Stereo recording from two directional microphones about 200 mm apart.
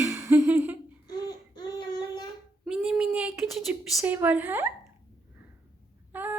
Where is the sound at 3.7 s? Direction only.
10° right (ahead or behind).